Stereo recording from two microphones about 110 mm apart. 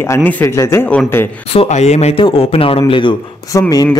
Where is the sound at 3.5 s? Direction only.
30° left (ahead or behind).